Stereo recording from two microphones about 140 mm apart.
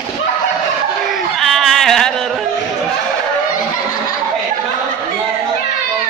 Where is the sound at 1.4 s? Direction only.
Centre (ahead or behind).